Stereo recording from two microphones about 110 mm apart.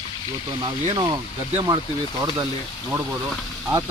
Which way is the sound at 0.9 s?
35° right (ahead or behind).